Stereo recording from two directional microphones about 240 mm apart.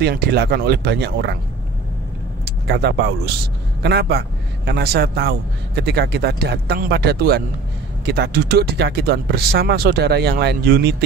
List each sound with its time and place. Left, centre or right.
0.0 s speech: right
2.6 s a man's voice: right